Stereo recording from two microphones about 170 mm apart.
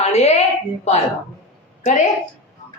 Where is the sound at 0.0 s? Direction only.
40° left (ahead or behind).